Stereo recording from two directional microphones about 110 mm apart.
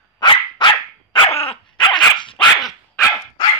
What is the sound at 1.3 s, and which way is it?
Dog, 60° left (ahead or behind).